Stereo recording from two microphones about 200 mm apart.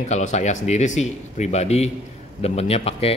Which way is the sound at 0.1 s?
35° left (ahead or behind).